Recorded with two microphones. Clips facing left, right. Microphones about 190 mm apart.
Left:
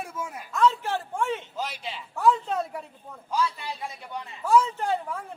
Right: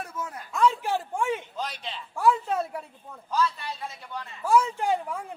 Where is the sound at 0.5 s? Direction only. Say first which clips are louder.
Even; 10° right (ahead or behind).